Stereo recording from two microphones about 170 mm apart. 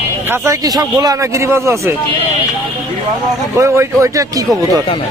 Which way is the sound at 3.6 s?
15° right (ahead or behind).